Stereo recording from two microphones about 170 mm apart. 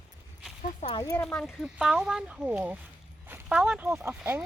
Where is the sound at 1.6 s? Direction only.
5° right (ahead or behind).